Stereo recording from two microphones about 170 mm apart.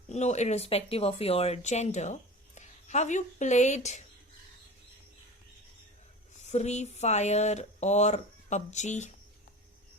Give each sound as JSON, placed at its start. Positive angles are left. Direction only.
{"t": 0.1, "sound": "speech", "side_deg": 40}
{"t": 6.4, "sound": "speech", "side_deg": 40}